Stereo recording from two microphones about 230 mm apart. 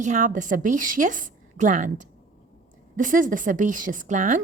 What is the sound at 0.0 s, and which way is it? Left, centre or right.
A woman's voice, right.